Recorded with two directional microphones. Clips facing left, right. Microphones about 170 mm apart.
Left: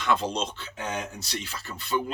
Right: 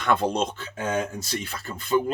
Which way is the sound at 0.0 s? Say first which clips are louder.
Right 3 dB; 55° right (ahead or behind).